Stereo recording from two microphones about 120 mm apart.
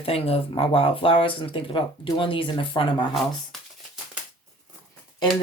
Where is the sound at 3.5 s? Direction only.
5° left (ahead or behind).